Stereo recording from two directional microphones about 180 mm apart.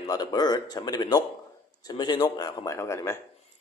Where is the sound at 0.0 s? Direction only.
20° left (ahead or behind).